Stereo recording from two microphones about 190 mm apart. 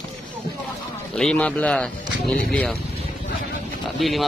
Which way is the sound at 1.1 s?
5° left (ahead or behind).